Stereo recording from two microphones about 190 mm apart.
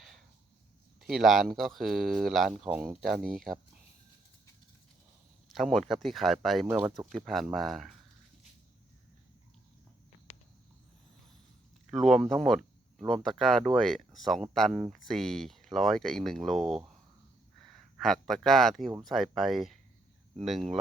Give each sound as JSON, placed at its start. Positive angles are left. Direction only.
{"t": 1.0, "sound": "speech", "side_deg": 0}
{"t": 5.5, "sound": "speech", "side_deg": 0}
{"t": 10.3, "sound": "cricket", "side_deg": 35}
{"t": 11.9, "sound": "speech", "side_deg": 0}
{"t": 18.0, "sound": "speech", "side_deg": 0}